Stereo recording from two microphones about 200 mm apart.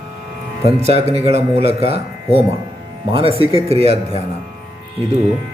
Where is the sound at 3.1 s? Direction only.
25° right (ahead or behind).